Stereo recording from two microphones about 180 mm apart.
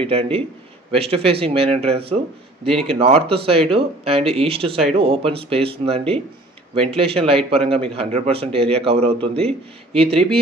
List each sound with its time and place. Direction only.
0.0 s a man's voice: 30° right (ahead or behind)